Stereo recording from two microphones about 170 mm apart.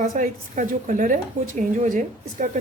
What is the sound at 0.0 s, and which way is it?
A woman's voice, 50° right (ahead or behind).